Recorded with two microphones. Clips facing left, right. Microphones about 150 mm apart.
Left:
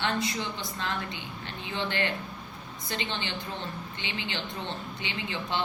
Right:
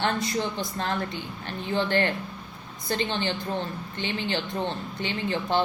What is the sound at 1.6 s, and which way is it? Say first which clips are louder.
A woman's voice: right 6 dB; 45° right (ahead or behind).